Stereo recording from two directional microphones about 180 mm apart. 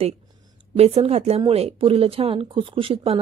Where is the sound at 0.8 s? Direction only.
35° right (ahead or behind).